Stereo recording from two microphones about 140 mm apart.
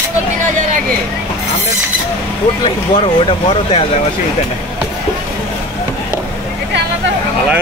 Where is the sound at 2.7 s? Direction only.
35° left (ahead or behind).